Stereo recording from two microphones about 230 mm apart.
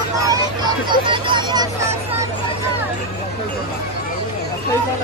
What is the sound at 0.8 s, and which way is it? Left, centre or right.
Vehicle, right.